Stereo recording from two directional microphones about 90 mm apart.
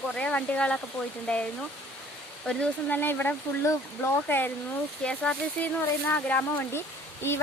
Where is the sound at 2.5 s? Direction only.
15° left (ahead or behind).